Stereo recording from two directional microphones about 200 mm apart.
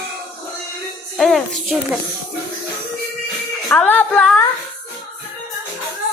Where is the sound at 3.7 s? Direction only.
10° left (ahead or behind).